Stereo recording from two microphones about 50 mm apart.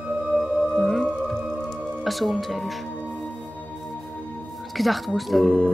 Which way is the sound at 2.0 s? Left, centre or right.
Centre.